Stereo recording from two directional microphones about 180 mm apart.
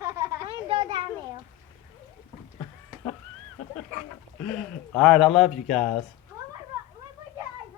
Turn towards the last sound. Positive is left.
turn(degrees=0)  # may be behind; listen again after turning